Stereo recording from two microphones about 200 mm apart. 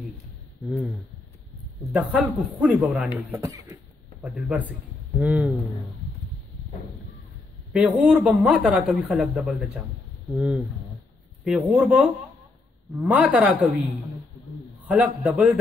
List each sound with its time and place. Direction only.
0.7 s a man's voice: centre (ahead or behind); by 3.7 s 15° right (ahead or behind)
4.2 s speech: 5° right (ahead or behind)
8.0 s speech: 5° right (ahead or behind)
10.3 s a man's voice: 5° right (ahead or behind)
14.9 s speech: 5° right (ahead or behind)